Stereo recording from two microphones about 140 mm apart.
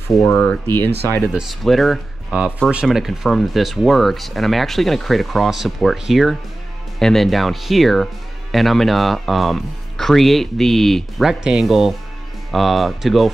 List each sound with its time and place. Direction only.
0.2 s speech: 15° left (ahead or behind)
1.3 s speech: centre (ahead or behind)